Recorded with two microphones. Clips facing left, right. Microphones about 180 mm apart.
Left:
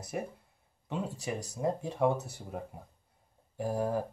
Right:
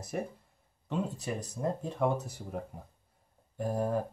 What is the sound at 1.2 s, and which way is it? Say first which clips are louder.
Speech: left 1 dB; 15° left (ahead or behind).